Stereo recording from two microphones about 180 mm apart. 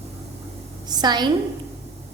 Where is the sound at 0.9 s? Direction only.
25° right (ahead or behind).